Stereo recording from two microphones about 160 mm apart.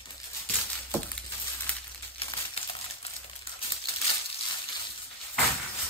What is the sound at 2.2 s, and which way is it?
Coin, 35° left (ahead or behind).